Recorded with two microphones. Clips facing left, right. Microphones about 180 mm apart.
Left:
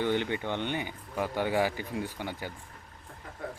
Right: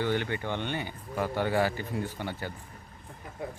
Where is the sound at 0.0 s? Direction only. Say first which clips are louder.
Left 1 dB; 20° left (ahead or behind).